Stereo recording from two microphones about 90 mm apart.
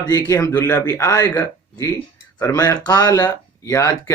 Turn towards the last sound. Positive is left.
turn(degrees=35)  # may be behind; listen again after turning